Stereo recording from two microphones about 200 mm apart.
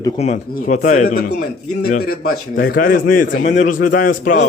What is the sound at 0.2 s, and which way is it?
A man's voice, 35° left (ahead or behind).